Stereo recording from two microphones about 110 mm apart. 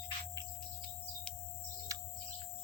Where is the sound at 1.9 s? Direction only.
30° right (ahead or behind).